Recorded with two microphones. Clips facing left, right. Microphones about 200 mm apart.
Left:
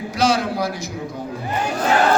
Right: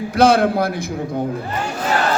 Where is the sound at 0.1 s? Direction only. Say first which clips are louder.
Right 6 dB; 55° right (ahead or behind).